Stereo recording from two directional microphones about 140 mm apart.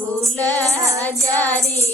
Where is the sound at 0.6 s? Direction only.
25° right (ahead or behind).